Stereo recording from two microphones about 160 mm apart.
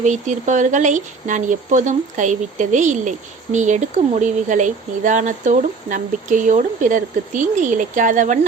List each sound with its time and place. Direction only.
0.0 s speech: 50° right (ahead or behind)